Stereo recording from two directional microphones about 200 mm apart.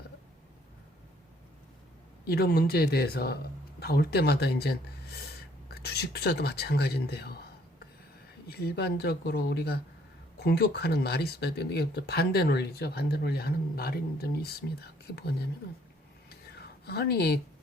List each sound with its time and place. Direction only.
2.2 s speech: 55° left (ahead or behind)
8.4 s speech: 50° left (ahead or behind)
16.3 s whispering: 55° left (ahead or behind)